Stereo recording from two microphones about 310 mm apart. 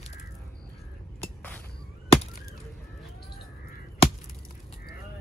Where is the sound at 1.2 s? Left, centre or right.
Centre.